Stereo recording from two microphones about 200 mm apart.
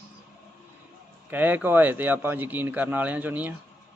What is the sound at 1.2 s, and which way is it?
A man's voice, 10° right (ahead or behind).